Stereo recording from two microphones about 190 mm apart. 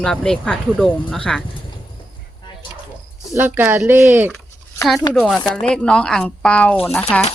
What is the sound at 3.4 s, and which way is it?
Speech, 10° right (ahead or behind).